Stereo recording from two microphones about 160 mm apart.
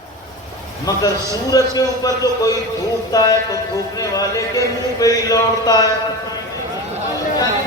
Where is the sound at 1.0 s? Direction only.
20° left (ahead or behind).